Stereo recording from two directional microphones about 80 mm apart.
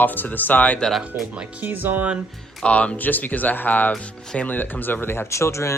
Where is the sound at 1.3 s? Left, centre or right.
Right.